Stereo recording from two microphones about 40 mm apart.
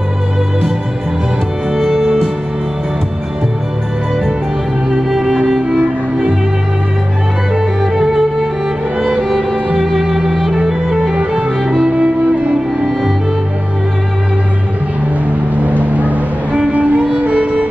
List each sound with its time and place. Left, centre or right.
1.7 s music: centre
7.8 s music: centre
9.8 s music: centre
11.1 s music: right
15.5 s vehicle: right
16.7 s music: right